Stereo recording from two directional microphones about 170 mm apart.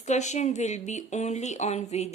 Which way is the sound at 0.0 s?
45° left (ahead or behind).